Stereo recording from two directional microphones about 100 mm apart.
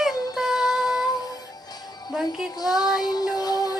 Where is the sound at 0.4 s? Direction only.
5° right (ahead or behind).